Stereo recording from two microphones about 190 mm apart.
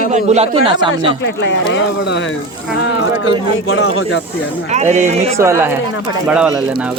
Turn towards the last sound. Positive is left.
turn(degrees=-5)  # may be behind; listen again after turning